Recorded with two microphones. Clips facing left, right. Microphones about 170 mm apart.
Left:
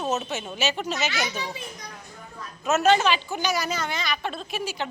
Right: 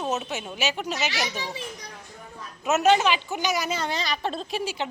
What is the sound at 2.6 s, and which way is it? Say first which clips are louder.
Speech: even; 15° right (ahead or behind).